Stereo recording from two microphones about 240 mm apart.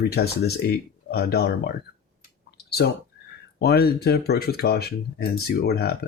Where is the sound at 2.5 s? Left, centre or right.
Left.